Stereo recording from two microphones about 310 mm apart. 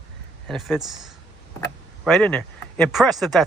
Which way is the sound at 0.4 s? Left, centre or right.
Centre.